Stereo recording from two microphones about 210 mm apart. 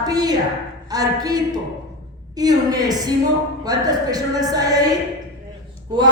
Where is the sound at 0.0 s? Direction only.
20° right (ahead or behind).